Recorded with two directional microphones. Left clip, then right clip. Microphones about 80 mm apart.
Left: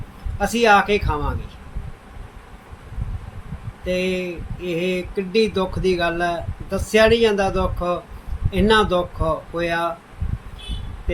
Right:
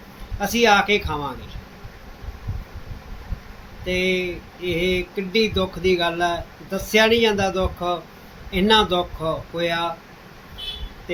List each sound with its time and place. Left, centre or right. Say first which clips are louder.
0.3 s speech: left 2 dB; left
3.8 s speech: right 1 dB; left